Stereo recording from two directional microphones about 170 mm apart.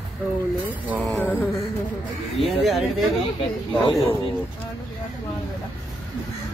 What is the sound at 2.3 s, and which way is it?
Speech, centre (ahead or behind).